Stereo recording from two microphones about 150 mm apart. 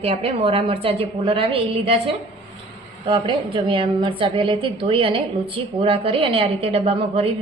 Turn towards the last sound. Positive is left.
turn(degrees=-45)  # may be behind; listen again after turning